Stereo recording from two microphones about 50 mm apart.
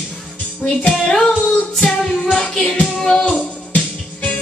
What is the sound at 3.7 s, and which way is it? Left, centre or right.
Music, left.